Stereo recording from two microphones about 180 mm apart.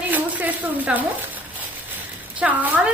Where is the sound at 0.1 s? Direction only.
10° right (ahead or behind).